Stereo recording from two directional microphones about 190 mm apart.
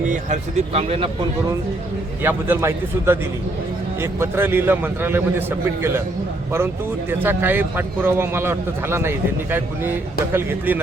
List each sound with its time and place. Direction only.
0.1 s speech: 40° right (ahead or behind)
2.2 s a man's voice: 10° right (ahead or behind)
7.1 s a man's voice: 10° right (ahead or behind)